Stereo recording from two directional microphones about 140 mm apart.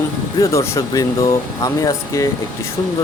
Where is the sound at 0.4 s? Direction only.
20° left (ahead or behind).